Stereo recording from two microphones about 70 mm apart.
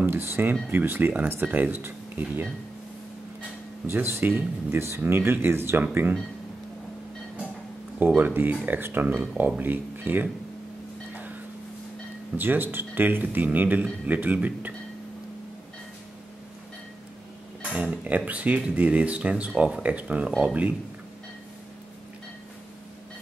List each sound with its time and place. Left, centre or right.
0.0 s speech: right
3.8 s speech: right
8.2 s speech: right
12.4 s speech: right
18.0 s speech: right